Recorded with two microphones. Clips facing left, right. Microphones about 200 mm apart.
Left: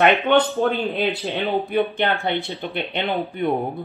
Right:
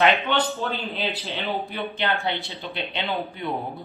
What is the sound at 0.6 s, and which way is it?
Speech, 55° left (ahead or behind).